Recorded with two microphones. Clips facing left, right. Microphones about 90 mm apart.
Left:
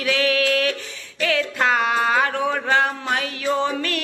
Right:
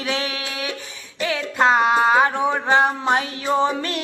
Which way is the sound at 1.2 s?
20° right (ahead or behind).